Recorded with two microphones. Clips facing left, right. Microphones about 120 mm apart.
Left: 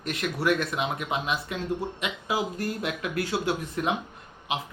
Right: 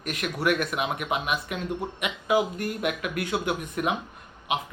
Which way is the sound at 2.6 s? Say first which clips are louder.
Right 2 dB; 30° left (ahead or behind).